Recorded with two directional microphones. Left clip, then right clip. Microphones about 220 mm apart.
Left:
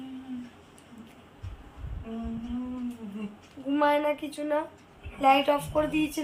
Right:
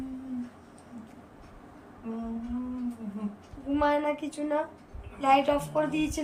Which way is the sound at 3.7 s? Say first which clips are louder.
Left 2 dB; 20° left (ahead or behind).